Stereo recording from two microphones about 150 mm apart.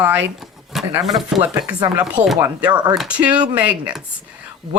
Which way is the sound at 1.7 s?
30° right (ahead or behind).